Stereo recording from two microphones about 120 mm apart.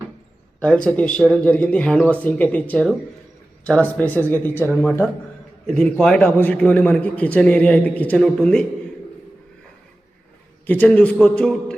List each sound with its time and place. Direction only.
0.9 s a man's voice: 10° left (ahead or behind)
4.7 s a man's voice: centre (ahead or behind)
10.7 s a man's voice: 10° left (ahead or behind)